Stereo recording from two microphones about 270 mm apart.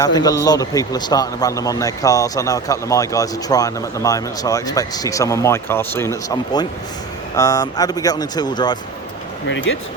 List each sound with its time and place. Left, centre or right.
0.0 s a man's voice: centre
9.5 s speech: left